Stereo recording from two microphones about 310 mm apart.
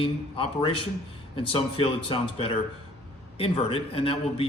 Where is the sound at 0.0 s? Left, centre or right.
Centre.